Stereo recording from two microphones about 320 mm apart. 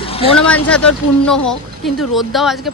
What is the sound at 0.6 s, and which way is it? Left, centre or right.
Speech, centre.